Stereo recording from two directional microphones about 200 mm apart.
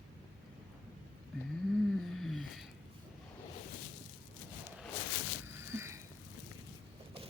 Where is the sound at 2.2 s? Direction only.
Centre (ahead or behind).